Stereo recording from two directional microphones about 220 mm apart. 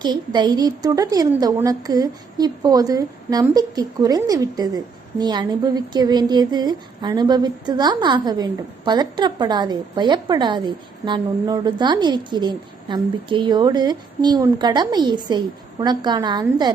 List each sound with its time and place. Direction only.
0.0 s a woman's voice: 20° right (ahead or behind)